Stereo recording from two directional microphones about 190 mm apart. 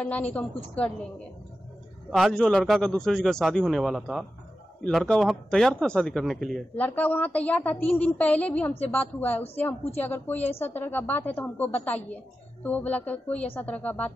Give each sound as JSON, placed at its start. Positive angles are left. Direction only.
{"t": 0.0, "sound": "speech", "side_deg": 5}
{"t": 2.0, "sound": "a man's voice", "side_deg": 0}